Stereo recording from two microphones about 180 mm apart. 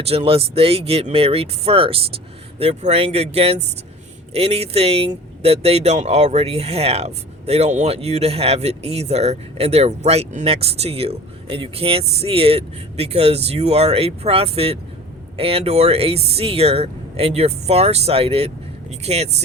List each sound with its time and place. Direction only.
0.0 s speech: 35° right (ahead or behind)